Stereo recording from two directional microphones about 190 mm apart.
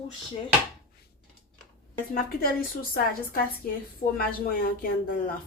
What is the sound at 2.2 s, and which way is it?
A woman's voice, 50° left (ahead or behind).